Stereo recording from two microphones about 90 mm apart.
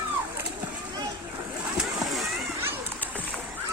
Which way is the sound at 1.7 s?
5° right (ahead or behind).